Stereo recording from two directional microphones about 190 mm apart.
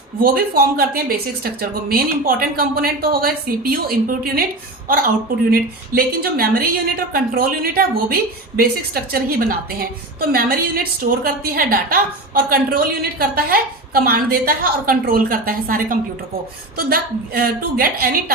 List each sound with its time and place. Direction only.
0.2 s a woman's voice: 50° right (ahead or behind)